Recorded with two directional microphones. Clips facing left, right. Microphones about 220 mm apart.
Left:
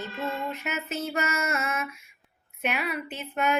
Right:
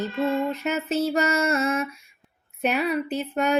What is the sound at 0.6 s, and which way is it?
Mantra, 30° right (ahead or behind).